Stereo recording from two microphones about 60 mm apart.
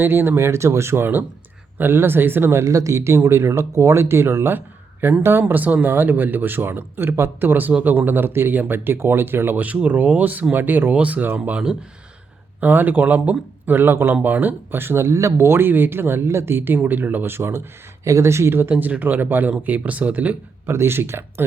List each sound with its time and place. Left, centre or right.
0.0 s speech: right
9.6 s speech: right
12.5 s speech: right
13.7 s speech: right
18.0 s speech: right
18.8 s speech: right
20.7 s speech: right